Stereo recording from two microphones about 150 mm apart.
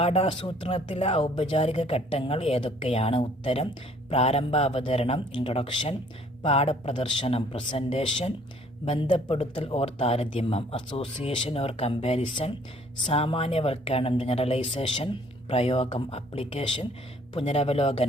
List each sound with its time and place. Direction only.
0.0 s a woman's voice: 40° left (ahead or behind)